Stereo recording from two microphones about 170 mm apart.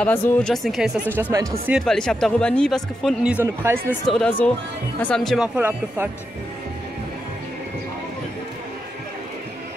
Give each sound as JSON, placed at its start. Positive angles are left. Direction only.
{"t": 0.0, "sound": "speech", "side_deg": 5}
{"t": 1.1, "sound": "speech", "side_deg": -15}
{"t": 1.7, "sound": "speech", "side_deg": 0}
{"t": 3.4, "sound": "speech", "side_deg": -15}
{"t": 4.0, "sound": "speech", "side_deg": 0}
{"t": 5.6, "sound": "speech", "side_deg": -10}